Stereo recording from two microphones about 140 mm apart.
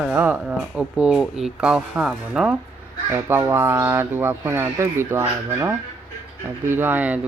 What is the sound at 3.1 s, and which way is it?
Speech, 20° right (ahead or behind).